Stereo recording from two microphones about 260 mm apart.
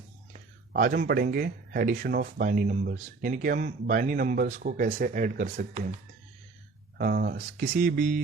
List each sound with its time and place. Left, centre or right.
0.7 s speech: right
7.0 s speech: right